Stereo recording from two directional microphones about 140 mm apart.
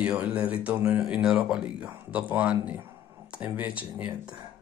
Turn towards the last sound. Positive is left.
turn(degrees=-10)  # may be behind; listen again after turning